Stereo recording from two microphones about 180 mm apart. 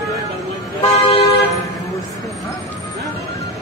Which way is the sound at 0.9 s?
35° left (ahead or behind).